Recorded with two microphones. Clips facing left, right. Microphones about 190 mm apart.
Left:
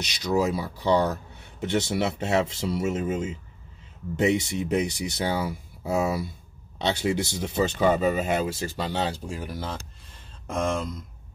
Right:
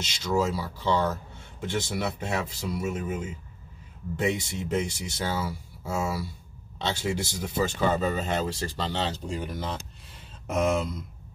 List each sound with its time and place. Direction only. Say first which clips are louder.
0.0 s speech: left 2 dB; 15° left (ahead or behind); by 11.0 s 5° right (ahead or behind)